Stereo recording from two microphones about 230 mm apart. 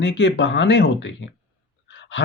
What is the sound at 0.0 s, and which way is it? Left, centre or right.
Speech, left.